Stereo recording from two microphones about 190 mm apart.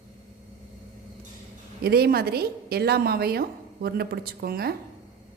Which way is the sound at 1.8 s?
55° right (ahead or behind).